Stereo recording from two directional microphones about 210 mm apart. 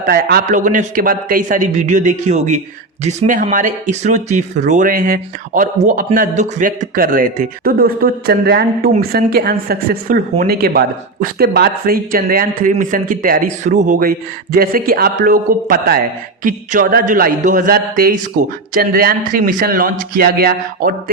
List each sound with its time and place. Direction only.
0.0 s speech: 45° right (ahead or behind)